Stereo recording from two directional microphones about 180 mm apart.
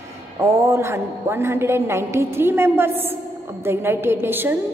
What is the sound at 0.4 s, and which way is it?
A woman's voice, 15° right (ahead or behind).